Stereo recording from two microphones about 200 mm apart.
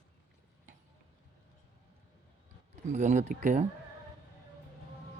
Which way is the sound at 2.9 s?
35° right (ahead or behind).